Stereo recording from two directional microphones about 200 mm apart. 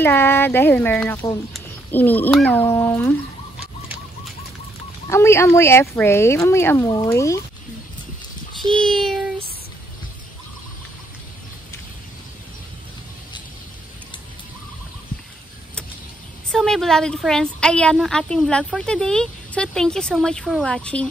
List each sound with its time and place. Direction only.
0.0 s speech: 10° left (ahead or behind)
5.1 s speech: 15° left (ahead or behind)
8.7 s child singing: 5° left (ahead or behind)
16.5 s a woman's voice: centre (ahead or behind)